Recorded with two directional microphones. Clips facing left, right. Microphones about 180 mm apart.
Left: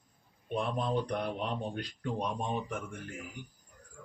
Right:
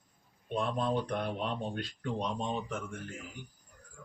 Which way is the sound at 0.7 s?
15° left (ahead or behind).